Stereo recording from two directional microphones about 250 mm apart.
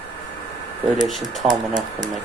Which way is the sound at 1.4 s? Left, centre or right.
Right.